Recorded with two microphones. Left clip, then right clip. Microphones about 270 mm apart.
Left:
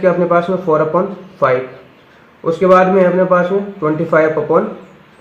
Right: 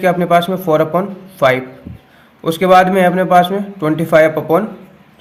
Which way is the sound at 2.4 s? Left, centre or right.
Right.